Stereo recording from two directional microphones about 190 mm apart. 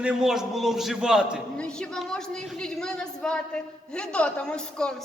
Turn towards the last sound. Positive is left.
turn(degrees=5)  # may be behind; listen again after turning